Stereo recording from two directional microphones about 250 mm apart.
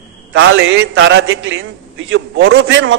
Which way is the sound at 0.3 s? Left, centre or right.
Right.